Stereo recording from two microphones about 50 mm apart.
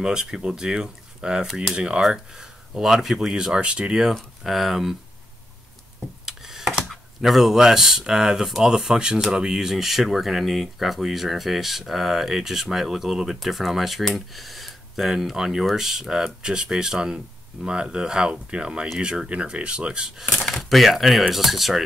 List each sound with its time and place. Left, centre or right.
0.0 s speech: centre
4.4 s speech: centre
6.2 s a sound: centre
7.2 s speech: centre
20.7 s speech: centre